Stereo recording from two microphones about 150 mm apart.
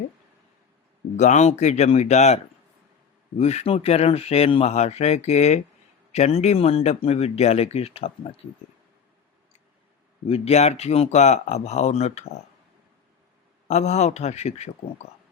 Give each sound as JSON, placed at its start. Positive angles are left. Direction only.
{"t": 1.1, "sound": "speech", "side_deg": 50}
{"t": 10.2, "sound": "speech", "side_deg": 45}
{"t": 13.7, "sound": "speech", "side_deg": 50}